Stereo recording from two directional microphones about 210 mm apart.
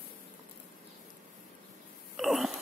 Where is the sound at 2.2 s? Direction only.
Centre (ahead or behind).